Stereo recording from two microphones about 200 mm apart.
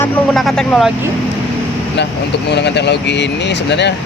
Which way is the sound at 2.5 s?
60° left (ahead or behind).